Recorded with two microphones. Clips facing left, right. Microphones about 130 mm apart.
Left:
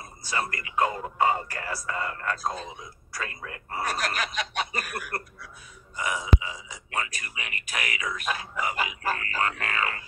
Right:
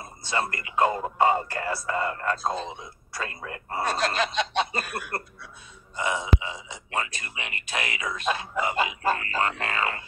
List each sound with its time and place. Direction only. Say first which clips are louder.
0.0 s speech: right 3 dB; 25° right (ahead or behind)